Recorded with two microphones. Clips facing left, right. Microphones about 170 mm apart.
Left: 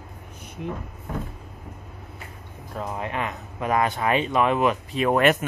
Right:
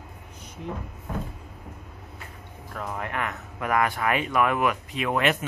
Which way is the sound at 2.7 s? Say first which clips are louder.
Left 2 dB; 20° left (ahead or behind).